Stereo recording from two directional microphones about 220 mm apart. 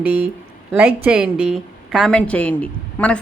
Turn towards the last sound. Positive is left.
turn(degrees=5)  # may be behind; listen again after turning